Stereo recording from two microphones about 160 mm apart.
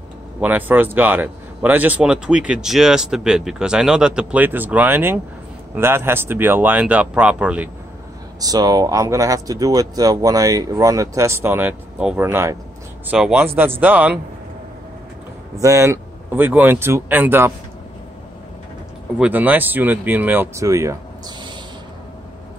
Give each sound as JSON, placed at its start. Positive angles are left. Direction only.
{"t": 0.4, "sound": "speech", "side_deg": -10}
{"t": 8.4, "sound": "speech", "side_deg": -25}
{"t": 15.5, "sound": "speech", "side_deg": -20}
{"t": 19.1, "sound": "speech", "side_deg": -10}